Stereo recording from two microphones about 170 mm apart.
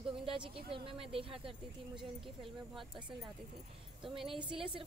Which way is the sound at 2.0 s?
30° right (ahead or behind).